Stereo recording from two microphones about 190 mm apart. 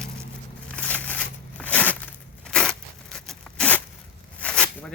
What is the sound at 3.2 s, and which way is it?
Zipper, 5° left (ahead or behind).